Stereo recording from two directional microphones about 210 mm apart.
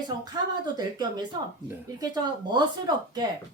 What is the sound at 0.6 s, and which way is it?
Speech, 20° right (ahead or behind).